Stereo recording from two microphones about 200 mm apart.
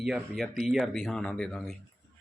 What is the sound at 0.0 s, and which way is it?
Speech, centre (ahead or behind).